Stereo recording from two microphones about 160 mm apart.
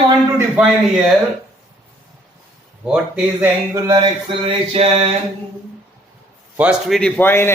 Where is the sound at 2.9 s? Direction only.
10° right (ahead or behind).